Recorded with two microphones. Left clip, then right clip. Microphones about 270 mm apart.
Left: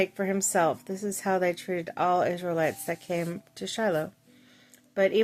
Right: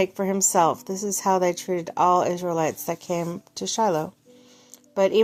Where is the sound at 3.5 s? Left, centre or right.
Centre.